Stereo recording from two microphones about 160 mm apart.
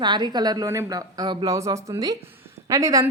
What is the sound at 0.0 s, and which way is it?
Speech, 25° right (ahead or behind).